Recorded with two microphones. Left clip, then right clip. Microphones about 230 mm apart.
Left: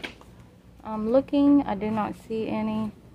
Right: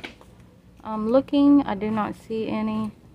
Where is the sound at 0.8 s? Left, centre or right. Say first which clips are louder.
Right 2 dB; centre.